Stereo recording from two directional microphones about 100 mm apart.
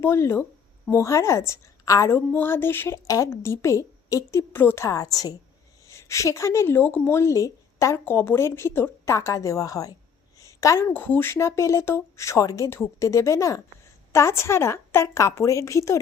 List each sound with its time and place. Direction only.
0.0 s a woman's voice: 25° left (ahead or behind)
8.0 s speech: 20° left (ahead or behind)
10.3 s a sound: 35° left (ahead or behind)
10.9 s speech: 20° left (ahead or behind)